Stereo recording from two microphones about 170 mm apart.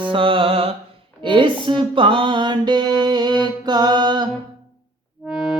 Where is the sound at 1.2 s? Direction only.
30° right (ahead or behind).